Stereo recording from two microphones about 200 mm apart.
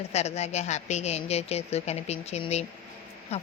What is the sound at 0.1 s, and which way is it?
Speech, 35° left (ahead or behind).